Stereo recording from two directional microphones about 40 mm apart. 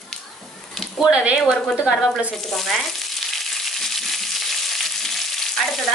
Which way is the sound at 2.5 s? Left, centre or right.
Centre.